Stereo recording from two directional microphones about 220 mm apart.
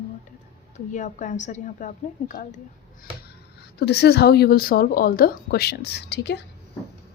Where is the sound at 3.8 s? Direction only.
50° left (ahead or behind).